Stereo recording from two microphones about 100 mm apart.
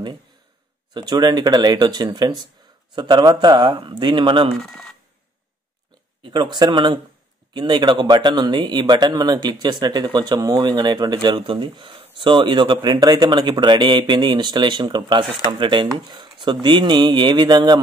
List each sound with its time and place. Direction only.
0.9 s speech: 45° right (ahead or behind)
4.6 s speech: 5° left (ahead or behind)
6.2 s speech: 50° right (ahead or behind)
11.4 s speech: 55° right (ahead or behind)